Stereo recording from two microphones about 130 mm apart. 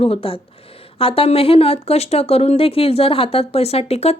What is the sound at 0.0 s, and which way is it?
Speech, 45° left (ahead or behind).